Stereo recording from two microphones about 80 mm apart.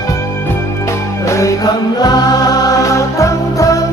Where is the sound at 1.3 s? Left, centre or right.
Left.